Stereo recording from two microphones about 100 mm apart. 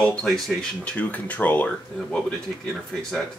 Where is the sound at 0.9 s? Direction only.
15° left (ahead or behind).